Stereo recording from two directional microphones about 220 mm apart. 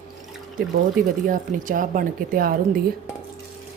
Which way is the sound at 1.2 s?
35° right (ahead or behind).